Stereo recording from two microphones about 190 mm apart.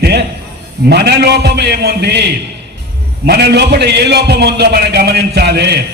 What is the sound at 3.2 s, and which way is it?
A man's voice, 60° right (ahead or behind).